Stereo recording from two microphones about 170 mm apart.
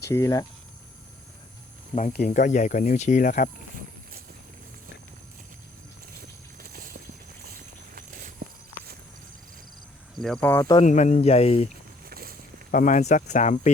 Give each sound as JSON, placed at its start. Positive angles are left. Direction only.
{"t": 0.0, "sound": "speech", "side_deg": 20}
{"t": 2.1, "sound": "speech", "side_deg": 50}
{"t": 6.6, "sound": "a sound", "side_deg": -55}
{"t": 7.4, "sound": "walk", "side_deg": -60}
{"t": 10.2, "sound": "speech", "side_deg": 5}
{"t": 10.8, "sound": "speech", "side_deg": 45}
{"t": 12.0, "sound": "boat", "side_deg": -60}
{"t": 12.7, "sound": "speech", "side_deg": 50}